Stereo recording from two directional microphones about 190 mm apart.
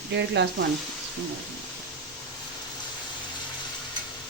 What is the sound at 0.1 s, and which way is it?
Speech, 65° right (ahead or behind).